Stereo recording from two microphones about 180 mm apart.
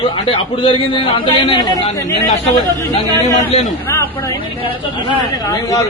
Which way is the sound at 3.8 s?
10° left (ahead or behind).